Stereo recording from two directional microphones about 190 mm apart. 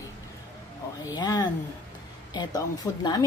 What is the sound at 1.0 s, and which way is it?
A woman's voice, 20° left (ahead or behind).